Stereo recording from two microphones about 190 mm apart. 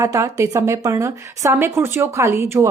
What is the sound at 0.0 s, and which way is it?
Speech, 15° right (ahead or behind).